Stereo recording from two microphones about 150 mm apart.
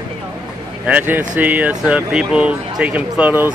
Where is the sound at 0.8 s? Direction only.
10° right (ahead or behind).